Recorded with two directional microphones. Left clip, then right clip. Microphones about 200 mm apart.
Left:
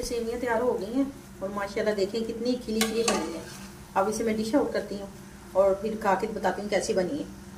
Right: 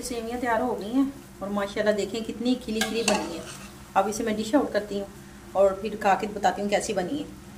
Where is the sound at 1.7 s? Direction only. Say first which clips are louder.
Right 1 dB; 30° right (ahead or behind).